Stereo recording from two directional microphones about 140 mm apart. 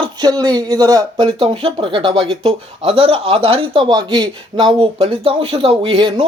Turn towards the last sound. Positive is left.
turn(degrees=-35)  # may be behind; listen again after turning